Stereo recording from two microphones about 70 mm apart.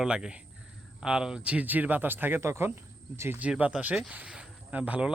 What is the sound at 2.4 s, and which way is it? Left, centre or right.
Speech, right.